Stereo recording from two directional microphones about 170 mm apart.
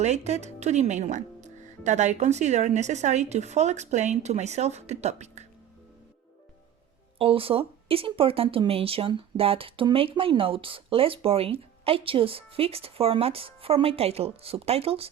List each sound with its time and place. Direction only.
0.0 s speech: 40° right (ahead or behind)
7.2 s speech: 35° right (ahead or behind)